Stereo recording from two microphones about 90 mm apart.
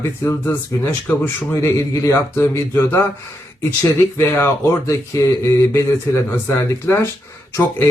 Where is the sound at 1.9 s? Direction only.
30° left (ahead or behind).